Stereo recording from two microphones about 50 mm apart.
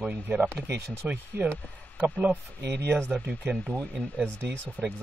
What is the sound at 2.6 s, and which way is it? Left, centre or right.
Speech, right.